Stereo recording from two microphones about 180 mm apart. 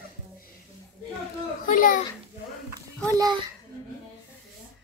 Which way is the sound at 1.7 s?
50° left (ahead or behind).